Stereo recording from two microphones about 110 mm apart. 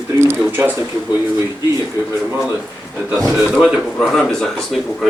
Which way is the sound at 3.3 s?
10° right (ahead or behind).